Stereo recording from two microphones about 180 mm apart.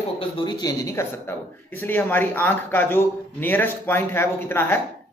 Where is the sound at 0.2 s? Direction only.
25° left (ahead or behind).